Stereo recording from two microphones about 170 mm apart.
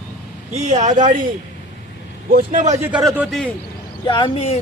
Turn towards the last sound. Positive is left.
turn(degrees=35)  # may be behind; listen again after turning